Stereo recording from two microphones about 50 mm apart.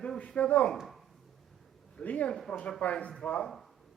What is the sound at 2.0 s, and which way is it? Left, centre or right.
A man's voice, left.